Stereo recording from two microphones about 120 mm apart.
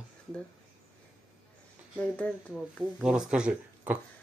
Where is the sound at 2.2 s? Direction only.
10° left (ahead or behind).